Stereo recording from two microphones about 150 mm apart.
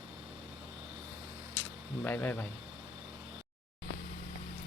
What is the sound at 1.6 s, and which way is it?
Speech, 10° left (ahead or behind).